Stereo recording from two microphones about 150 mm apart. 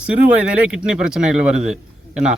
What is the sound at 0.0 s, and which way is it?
Speech, 10° right (ahead or behind).